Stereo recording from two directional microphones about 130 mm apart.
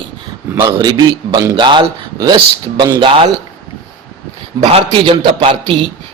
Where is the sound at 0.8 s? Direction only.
30° right (ahead or behind).